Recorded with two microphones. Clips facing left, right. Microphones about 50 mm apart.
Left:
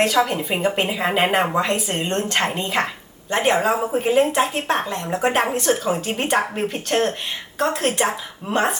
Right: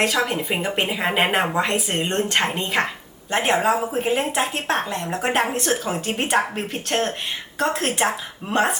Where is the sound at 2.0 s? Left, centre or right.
Right.